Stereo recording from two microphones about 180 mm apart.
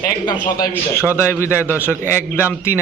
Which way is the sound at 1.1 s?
10° left (ahead or behind).